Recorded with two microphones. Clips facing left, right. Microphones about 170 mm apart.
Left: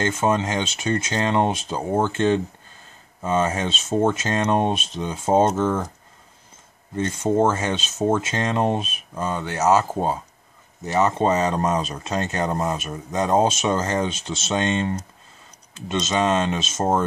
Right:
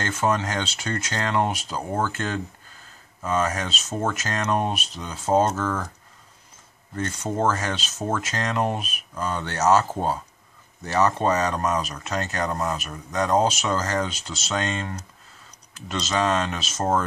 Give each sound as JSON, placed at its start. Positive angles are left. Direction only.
{"t": 0.0, "sound": "speech", "side_deg": 20}
{"t": 7.0, "sound": "speech", "side_deg": 20}
{"t": 9.4, "sound": "speech", "side_deg": 10}